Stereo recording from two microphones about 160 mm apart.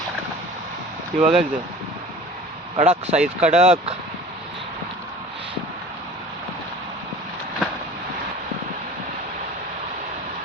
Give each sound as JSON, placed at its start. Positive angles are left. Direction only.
{"t": 1.2, "sound": "speech", "side_deg": -5}
{"t": 2.7, "sound": "speech", "side_deg": -40}
{"t": 3.2, "sound": "speech", "side_deg": -5}
{"t": 3.6, "sound": "speech", "side_deg": -40}